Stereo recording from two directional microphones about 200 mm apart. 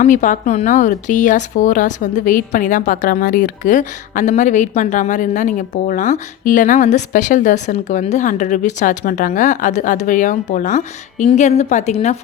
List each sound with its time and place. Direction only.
0.0 s a woman's voice: 40° left (ahead or behind)